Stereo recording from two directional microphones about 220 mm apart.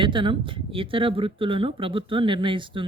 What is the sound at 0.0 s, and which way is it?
Speech, 20° right (ahead or behind).